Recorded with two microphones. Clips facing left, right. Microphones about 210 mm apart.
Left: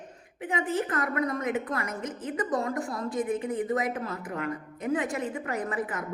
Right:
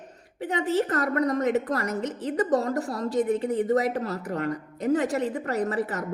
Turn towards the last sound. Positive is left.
turn(degrees=-40)  # may be behind; listen again after turning